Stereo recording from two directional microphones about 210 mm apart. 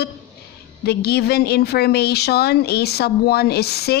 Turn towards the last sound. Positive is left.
turn(degrees=50)  # may be behind; listen again after turning